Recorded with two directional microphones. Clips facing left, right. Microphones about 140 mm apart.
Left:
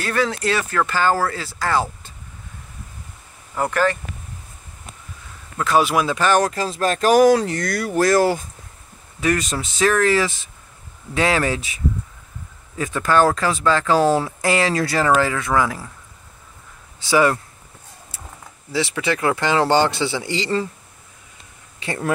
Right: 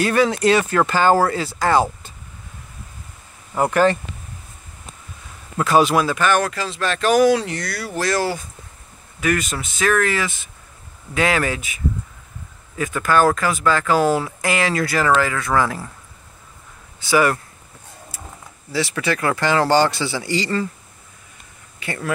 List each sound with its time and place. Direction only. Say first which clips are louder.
0.0 s speech: right 5 dB; 15° right (ahead or behind)
3.5 s speech: right 3 dB; 20° right (ahead or behind)
5.6 s a man's voice: right 2 dB; centre (ahead or behind)
6.1 s speech: left 1 dB; 35° left (ahead or behind)
9.2 s speech: left 1 dB; 35° left (ahead or behind); by 15.7 s 15° left (ahead or behind)
17.0 s speech: left 1 dB; 25° left (ahead or behind)
18.7 s speech: even; 20° left (ahead or behind)
21.7 s speech: left 3 dB; 30° left (ahead or behind)